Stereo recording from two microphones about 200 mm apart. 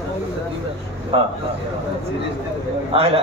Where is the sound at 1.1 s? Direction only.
30° right (ahead or behind).